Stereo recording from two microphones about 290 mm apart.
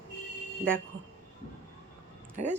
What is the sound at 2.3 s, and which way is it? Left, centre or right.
Speech, right.